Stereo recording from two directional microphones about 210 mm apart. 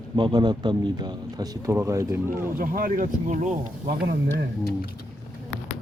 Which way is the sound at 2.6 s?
40° right (ahead or behind).